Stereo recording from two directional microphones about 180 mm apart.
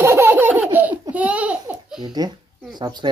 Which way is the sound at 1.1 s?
5° right (ahead or behind).